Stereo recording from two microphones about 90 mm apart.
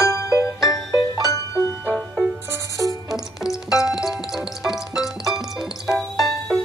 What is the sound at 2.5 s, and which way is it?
Music, 40° right (ahead or behind).